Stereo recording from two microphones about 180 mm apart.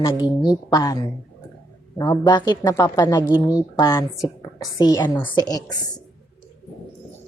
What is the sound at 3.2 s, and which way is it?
Speech, 10° right (ahead or behind).